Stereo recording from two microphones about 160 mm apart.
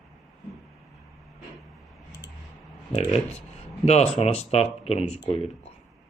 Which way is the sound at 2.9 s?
40° left (ahead or behind).